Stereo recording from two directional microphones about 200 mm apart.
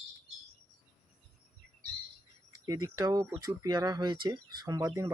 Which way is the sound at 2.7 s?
20° right (ahead or behind).